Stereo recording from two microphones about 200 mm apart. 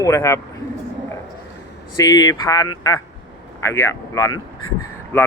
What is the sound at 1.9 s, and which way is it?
Speech, 20° left (ahead or behind).